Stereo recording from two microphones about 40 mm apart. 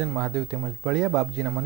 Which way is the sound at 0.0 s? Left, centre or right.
Centre.